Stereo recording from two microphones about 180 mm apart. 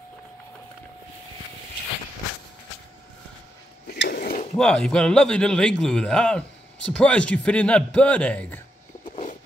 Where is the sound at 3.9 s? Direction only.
65° left (ahead or behind).